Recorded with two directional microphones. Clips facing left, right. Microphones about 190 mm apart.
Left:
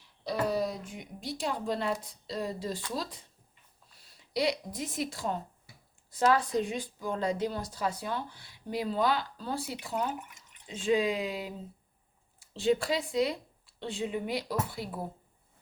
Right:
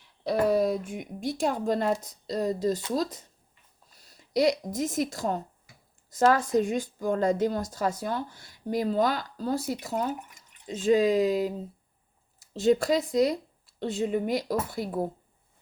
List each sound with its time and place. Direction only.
0.3 s a woman's voice: 55° right (ahead or behind)